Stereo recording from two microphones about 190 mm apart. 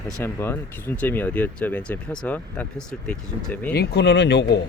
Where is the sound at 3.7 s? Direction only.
60° left (ahead or behind).